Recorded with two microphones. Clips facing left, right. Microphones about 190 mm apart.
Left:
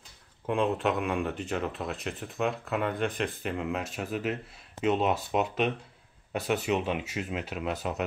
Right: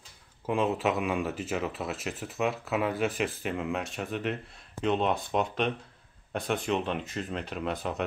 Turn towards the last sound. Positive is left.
turn(degrees=5)  # may be behind; listen again after turning